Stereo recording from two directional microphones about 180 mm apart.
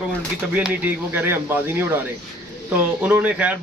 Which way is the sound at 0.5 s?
10° right (ahead or behind).